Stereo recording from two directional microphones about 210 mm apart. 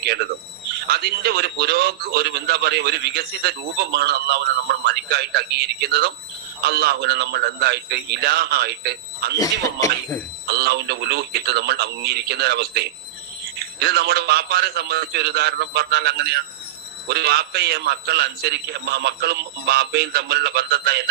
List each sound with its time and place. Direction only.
0.0 s a man's voice: 50° right (ahead or behind)
9.4 s speech: 15° left (ahead or behind)
10.4 s a man's voice: 50° right (ahead or behind)